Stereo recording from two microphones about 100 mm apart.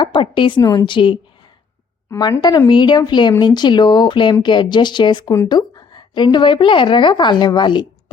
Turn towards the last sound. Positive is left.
turn(degrees=50)  # may be behind; listen again after turning